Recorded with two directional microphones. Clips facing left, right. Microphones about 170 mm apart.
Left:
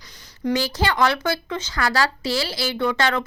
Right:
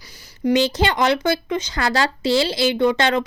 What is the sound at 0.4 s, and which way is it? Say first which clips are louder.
Speech: right 4 dB; 20° right (ahead or behind).